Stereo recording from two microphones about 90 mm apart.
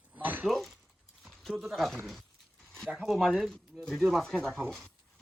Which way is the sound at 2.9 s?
5° right (ahead or behind).